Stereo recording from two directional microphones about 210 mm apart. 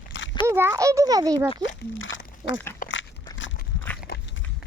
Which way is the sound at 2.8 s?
40° left (ahead or behind).